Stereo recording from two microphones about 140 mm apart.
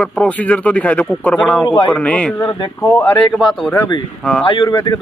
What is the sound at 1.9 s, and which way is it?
Speech, 10° left (ahead or behind).